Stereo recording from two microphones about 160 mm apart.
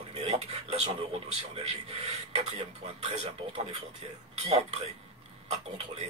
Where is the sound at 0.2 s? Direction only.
40° right (ahead or behind).